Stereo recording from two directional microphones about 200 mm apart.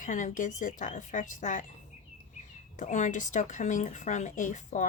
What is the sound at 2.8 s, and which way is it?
Speech, 40° left (ahead or behind).